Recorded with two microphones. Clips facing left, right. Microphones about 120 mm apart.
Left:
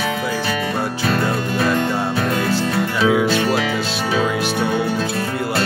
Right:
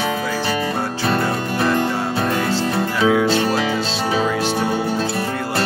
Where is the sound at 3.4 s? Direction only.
30° right (ahead or behind).